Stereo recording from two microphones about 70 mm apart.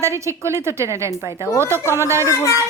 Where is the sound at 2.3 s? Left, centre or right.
Left.